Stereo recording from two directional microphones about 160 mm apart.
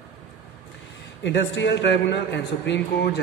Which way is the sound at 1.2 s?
90° left.